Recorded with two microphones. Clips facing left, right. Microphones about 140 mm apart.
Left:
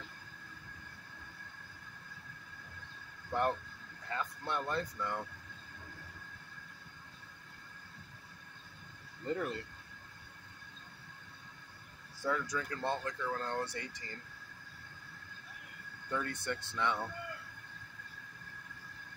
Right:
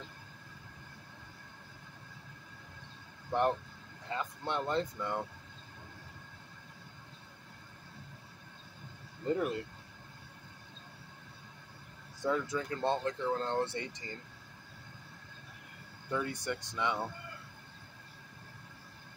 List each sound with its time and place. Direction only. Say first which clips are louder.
3.3 s speech: right 3 dB; 20° right (ahead or behind)
9.2 s speech: right 4 dB; 20° right (ahead or behind)
12.2 s speech: right 3 dB; 25° right (ahead or behind)
16.1 s speech: right 2 dB; 10° right (ahead or behind)